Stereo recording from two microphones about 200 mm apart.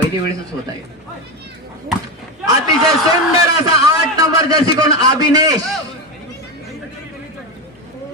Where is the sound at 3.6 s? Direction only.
20° right (ahead or behind).